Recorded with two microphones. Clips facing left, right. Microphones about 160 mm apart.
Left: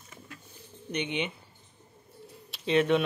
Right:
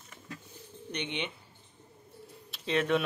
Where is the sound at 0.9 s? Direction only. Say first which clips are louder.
Left 5 dB; 5° left (ahead or behind).